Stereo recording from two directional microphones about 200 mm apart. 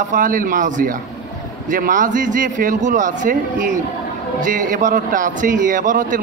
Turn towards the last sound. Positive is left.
turn(degrees=-40)  # may be behind; listen again after turning